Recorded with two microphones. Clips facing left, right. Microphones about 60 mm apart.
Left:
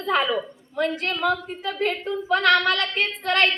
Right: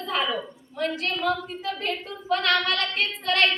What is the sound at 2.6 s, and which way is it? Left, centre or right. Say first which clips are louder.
Speech: left 3 dB; left.